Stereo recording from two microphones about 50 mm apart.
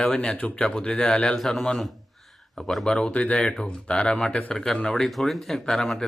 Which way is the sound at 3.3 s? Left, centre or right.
Centre.